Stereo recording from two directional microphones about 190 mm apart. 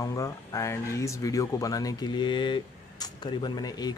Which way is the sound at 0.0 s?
15° left (ahead or behind).